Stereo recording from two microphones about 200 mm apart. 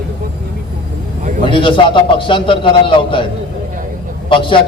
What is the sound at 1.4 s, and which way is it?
A man's voice, 25° left (ahead or behind).